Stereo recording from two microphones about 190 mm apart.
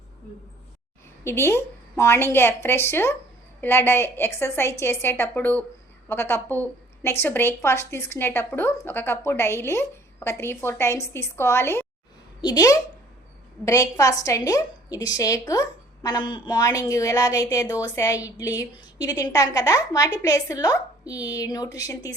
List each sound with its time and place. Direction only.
1.2 s a woman's voice: 15° left (ahead or behind)